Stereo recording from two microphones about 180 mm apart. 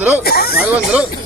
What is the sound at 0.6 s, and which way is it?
Speech, 5° right (ahead or behind).